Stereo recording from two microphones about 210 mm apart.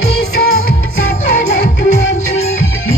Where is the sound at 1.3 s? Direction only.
35° left (ahead or behind).